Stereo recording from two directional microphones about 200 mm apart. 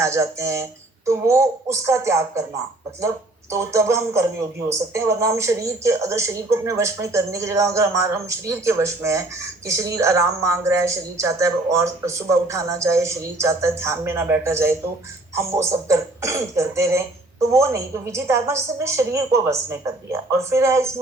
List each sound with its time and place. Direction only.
0.0 s speech: 15° right (ahead or behind)
3.5 s speech: 15° right (ahead or behind)